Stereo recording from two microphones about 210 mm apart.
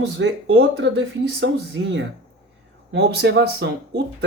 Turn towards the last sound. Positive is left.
turn(degrees=-50)  # may be behind; listen again after turning